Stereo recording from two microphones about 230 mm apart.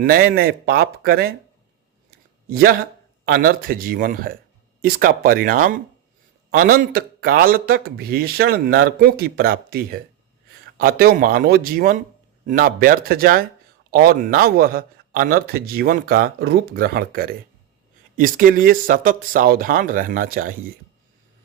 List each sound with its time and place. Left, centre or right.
0.0 s speech: right
2.0 s a sound: right
3.2 s speech: right